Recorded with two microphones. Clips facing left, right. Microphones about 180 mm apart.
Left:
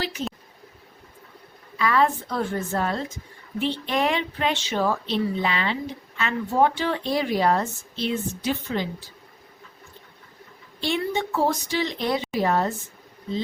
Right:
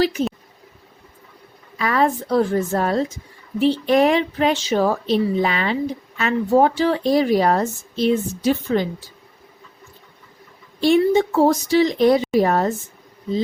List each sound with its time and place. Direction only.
1.8 s speech: 40° right (ahead or behind)
10.8 s speech: 45° right (ahead or behind)